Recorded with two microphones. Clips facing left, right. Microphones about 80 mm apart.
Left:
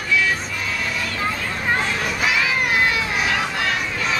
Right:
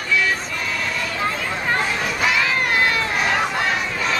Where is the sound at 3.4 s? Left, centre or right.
Centre.